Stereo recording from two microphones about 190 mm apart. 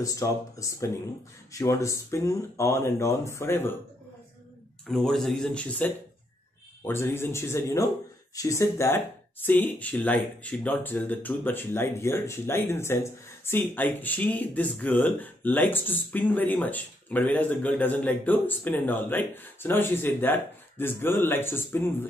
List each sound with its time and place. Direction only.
0.0 s speech: 15° left (ahead or behind)
4.8 s a man's voice: centre (ahead or behind)